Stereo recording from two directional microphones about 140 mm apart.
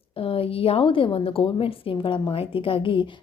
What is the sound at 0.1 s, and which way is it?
A woman's voice, 40° left (ahead or behind).